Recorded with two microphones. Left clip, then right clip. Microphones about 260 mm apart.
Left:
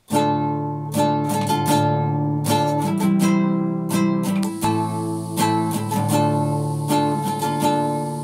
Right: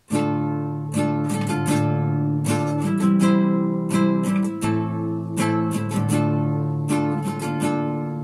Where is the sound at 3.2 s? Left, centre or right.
Left.